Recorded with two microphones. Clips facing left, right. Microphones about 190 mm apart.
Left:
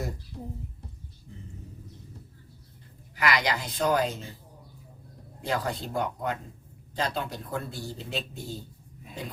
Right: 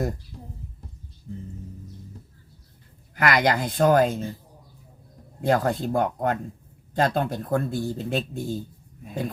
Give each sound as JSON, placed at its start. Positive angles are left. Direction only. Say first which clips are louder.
{"t": 3.2, "sound": "a man's voice", "louder": "right 6 dB", "side_deg": -50}
{"t": 5.4, "sound": "a man's voice", "louder": "right 8 dB", "side_deg": -50}